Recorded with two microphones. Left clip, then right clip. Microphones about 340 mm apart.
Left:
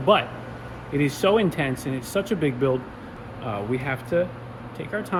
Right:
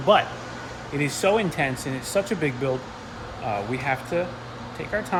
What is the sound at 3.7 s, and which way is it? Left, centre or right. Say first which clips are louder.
Speech: left 4 dB; centre.